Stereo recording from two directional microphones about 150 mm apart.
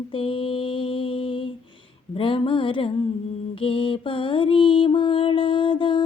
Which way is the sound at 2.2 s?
35° left (ahead or behind).